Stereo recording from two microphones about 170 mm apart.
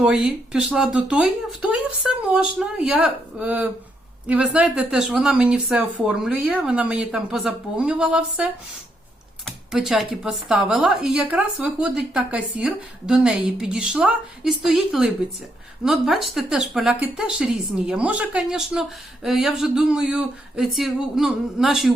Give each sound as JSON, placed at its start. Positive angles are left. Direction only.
{"t": 0.0, "sound": "speech", "side_deg": -5}
{"t": 9.7, "sound": "speech", "side_deg": 0}